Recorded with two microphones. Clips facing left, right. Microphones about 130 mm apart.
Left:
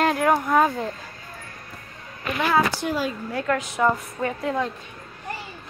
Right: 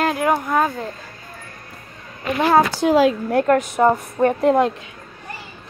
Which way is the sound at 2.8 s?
90° right.